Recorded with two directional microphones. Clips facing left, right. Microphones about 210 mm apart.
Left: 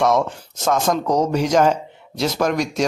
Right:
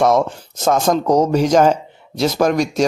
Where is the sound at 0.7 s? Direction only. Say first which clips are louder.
Right 4 dB; 35° right (ahead or behind).